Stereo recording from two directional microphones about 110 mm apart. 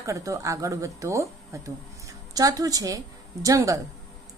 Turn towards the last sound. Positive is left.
turn(degrees=-30)  # may be behind; listen again after turning